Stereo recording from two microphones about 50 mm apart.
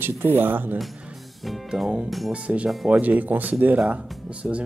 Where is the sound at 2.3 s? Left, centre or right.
Right.